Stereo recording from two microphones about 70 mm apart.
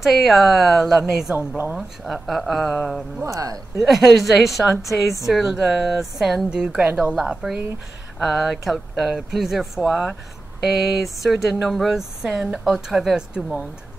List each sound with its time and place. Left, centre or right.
0.0 s speech: centre
3.3 s speech: right
3.8 s speech: centre
4.8 s speech: left
5.2 s speech: centre